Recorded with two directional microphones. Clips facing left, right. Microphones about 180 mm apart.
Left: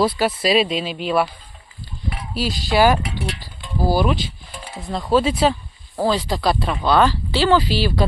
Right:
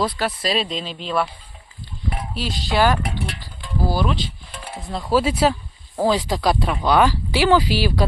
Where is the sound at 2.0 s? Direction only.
50° right (ahead or behind).